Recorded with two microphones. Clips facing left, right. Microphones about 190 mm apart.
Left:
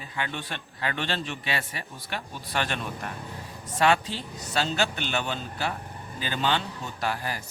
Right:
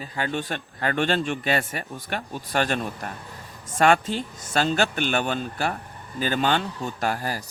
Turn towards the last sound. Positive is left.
turn(degrees=-40)  # may be behind; listen again after turning